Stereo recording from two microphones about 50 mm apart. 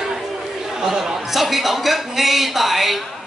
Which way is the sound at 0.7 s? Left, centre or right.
Centre.